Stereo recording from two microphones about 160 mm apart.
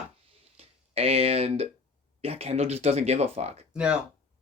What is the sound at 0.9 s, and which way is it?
Speech, 40° right (ahead or behind).